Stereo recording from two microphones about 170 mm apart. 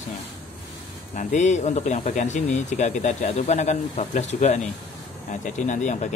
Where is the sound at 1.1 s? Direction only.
45° left (ahead or behind).